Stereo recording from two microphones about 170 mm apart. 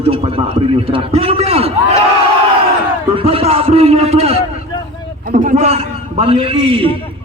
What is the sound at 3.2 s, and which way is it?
A man's voice, 35° right (ahead or behind).